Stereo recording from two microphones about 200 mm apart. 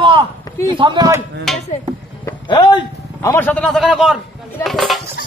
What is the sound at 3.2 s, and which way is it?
A man's voice, 10° left (ahead or behind).